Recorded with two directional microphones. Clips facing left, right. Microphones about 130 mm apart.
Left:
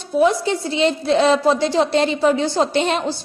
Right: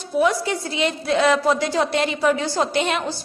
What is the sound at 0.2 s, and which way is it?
A woman's voice, 25° left (ahead or behind).